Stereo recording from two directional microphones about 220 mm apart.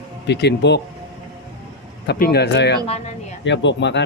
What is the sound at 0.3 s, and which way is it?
Speech, 50° left (ahead or behind).